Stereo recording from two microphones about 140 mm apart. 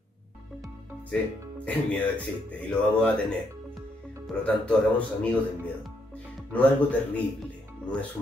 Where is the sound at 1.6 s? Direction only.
10° left (ahead or behind).